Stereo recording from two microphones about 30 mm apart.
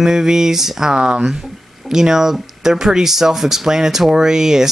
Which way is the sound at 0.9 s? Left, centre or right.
Right.